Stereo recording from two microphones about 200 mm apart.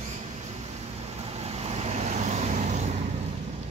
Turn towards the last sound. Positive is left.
turn(degrees=-35)  # may be behind; listen again after turning